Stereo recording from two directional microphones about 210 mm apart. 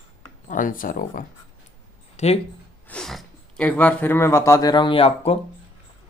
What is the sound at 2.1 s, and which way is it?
Speech, 30° left (ahead or behind).